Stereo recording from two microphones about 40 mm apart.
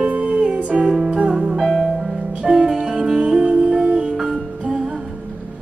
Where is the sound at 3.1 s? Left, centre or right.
Right.